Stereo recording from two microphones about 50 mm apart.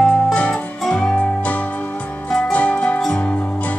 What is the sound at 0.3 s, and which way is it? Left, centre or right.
Music, left.